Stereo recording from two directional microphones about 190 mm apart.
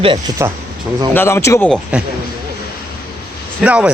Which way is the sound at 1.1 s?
15° left (ahead or behind).